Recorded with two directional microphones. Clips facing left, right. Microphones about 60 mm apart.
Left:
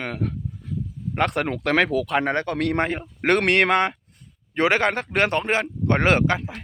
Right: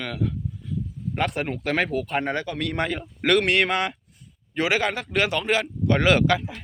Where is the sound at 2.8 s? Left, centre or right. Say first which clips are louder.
Left 3 dB; left.